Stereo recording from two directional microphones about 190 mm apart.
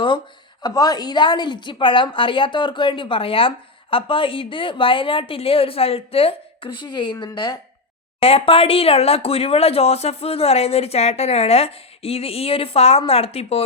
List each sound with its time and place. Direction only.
0.6 s a woman's voice: 20° left (ahead or behind)